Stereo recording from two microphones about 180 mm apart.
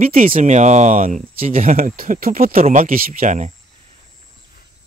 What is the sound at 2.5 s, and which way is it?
Speech, 40° right (ahead or behind).